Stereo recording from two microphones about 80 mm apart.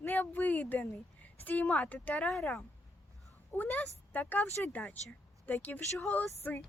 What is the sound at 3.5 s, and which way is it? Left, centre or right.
A woman's voice, centre.